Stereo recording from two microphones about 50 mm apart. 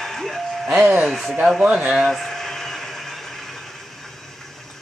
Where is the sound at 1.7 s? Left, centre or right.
Centre.